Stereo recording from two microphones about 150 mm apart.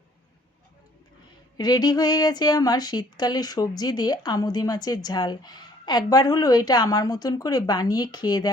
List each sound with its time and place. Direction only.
1.5 s speech: 25° left (ahead or behind)